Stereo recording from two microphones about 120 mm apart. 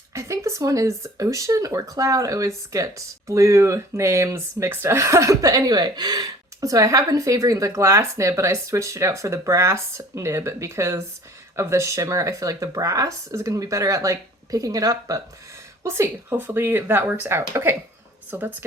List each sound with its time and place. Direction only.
0.1 s speech: 25° right (ahead or behind)